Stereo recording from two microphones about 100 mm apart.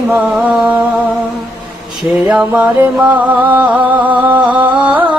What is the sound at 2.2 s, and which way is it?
Music, 15° right (ahead or behind).